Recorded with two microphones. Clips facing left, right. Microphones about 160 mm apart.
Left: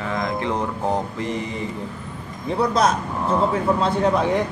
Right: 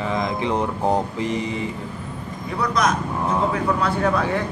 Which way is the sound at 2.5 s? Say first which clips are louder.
Left 2 dB; 30° left (ahead or behind).